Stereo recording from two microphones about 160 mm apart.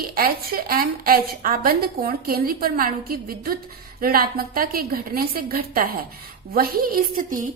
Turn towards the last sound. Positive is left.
turn(degrees=-60)  # may be behind; listen again after turning